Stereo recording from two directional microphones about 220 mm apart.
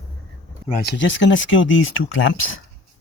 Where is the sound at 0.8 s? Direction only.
55° left (ahead or behind).